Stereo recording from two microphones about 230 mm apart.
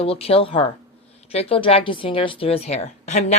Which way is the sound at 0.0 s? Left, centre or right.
Left.